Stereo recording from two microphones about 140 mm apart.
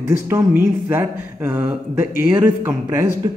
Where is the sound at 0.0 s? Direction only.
20° right (ahead or behind).